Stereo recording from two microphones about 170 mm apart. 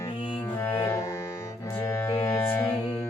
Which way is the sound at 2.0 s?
15° left (ahead or behind).